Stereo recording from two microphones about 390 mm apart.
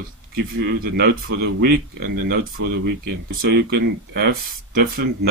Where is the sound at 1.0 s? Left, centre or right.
Right.